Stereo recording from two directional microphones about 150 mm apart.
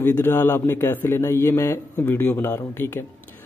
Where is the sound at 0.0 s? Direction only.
15° left (ahead or behind).